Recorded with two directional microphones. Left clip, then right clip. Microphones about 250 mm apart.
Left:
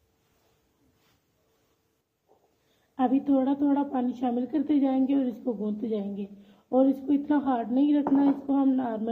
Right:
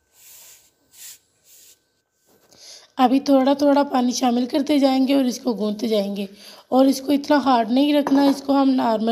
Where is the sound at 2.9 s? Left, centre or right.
Right.